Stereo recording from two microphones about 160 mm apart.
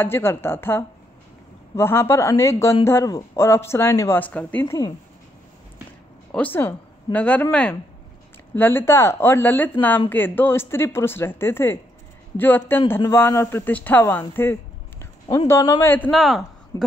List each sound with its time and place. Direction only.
0.0 s speech: 15° left (ahead or behind)
6.3 s a woman's voice: 10° left (ahead or behind)
8.5 s speech: 15° left (ahead or behind)
16.1 s a man's voice: centre (ahead or behind)